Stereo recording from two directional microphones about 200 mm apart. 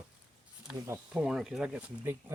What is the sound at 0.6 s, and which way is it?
Speech, 5° right (ahead or behind).